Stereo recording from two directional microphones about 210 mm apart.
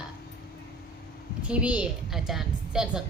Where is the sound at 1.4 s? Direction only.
5° right (ahead or behind).